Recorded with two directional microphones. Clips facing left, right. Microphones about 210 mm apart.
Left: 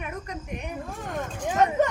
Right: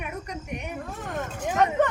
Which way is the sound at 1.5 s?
5° left (ahead or behind).